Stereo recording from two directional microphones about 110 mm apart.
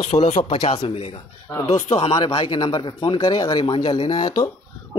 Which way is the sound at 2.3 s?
50° left (ahead or behind).